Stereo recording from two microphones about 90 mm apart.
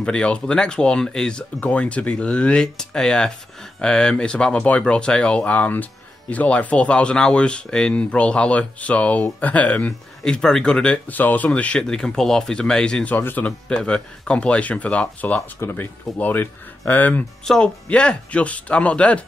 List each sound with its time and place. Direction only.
0.0 s speech: 10° left (ahead or behind)
13.1 s speech: 20° left (ahead or behind)
13.7 s speech: 10° left (ahead or behind)